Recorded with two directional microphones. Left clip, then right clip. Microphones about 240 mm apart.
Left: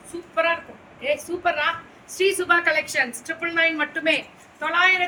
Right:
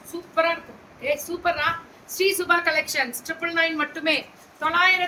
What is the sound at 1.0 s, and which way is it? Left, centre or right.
A woman's voice, centre.